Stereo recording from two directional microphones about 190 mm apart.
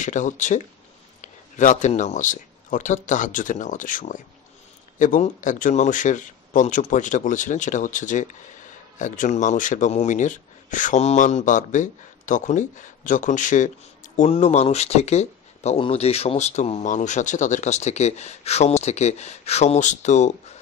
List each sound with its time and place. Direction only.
0.0 s speech: 40° left (ahead or behind)